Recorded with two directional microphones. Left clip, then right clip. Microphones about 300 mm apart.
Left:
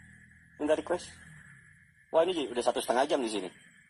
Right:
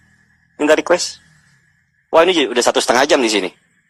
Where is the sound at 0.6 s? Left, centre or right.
Right.